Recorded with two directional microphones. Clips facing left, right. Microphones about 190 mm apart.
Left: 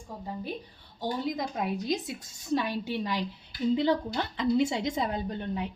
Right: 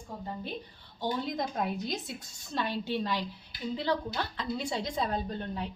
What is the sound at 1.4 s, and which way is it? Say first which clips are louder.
A woman's voice: left 1 dB; 10° left (ahead or behind).